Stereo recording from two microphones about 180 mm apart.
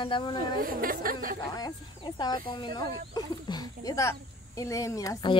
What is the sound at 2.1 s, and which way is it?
Speech, 25° left (ahead or behind).